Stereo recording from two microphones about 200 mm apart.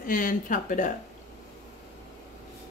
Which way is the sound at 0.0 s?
45° left (ahead or behind).